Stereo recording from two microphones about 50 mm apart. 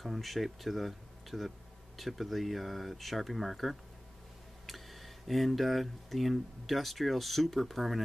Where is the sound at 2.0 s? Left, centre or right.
Centre.